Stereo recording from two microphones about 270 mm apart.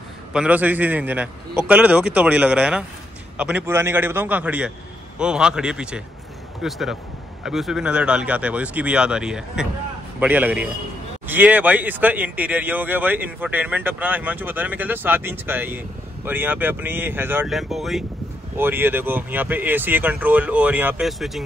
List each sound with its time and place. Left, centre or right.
0.3 s a man's voice: centre